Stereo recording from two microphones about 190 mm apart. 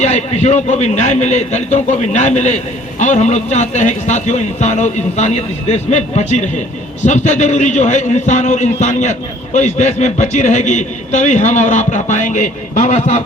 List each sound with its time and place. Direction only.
0.0 s a man's voice: 35° left (ahead or behind)